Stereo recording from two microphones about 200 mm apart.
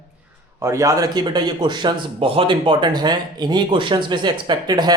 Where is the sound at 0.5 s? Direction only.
15° right (ahead or behind).